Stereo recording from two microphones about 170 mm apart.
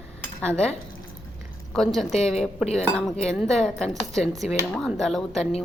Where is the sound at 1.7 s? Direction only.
Centre (ahead or behind).